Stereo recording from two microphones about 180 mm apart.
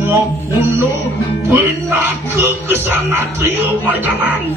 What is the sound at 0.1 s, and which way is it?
A man's voice, 10° right (ahead or behind).